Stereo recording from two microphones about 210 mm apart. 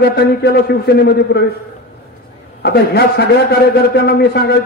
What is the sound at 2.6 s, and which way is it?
A man's voice, 50° left (ahead or behind).